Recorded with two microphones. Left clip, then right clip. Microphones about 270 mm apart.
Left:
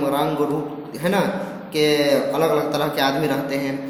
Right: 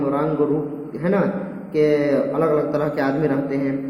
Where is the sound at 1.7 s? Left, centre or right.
Centre.